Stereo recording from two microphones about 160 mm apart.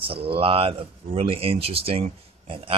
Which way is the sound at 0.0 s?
35° right (ahead or behind).